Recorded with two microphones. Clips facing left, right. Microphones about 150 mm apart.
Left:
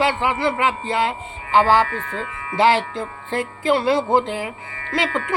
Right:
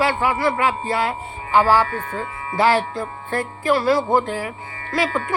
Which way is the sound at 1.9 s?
45° right (ahead or behind).